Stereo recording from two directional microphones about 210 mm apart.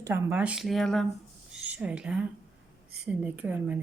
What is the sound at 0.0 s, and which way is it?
A woman's voice, 10° right (ahead or behind).